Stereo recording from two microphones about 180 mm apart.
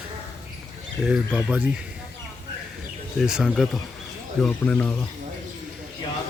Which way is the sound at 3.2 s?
5° right (ahead or behind).